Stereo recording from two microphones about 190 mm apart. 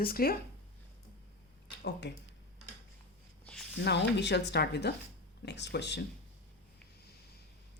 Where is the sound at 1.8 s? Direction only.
65° left (ahead or behind).